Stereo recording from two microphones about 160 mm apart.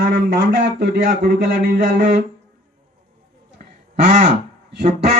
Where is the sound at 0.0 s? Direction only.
65° right (ahead or behind).